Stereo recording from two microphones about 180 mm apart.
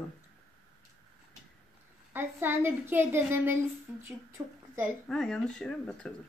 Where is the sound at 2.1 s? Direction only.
10° right (ahead or behind).